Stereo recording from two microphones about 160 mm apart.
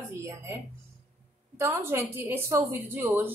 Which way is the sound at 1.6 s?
15° right (ahead or behind).